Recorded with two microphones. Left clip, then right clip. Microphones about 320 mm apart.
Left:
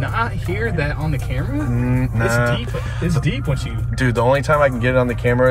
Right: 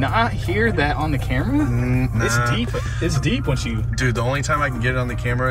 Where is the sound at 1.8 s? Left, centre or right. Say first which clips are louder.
Left 2 dB; centre.